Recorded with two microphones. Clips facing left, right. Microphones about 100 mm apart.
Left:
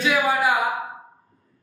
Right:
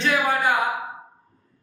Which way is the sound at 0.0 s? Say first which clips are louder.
Left 1 dB; 10° left (ahead or behind).